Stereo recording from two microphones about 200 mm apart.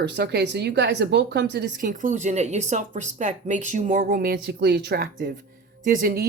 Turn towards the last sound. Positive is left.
turn(degrees=-50)  # may be behind; listen again after turning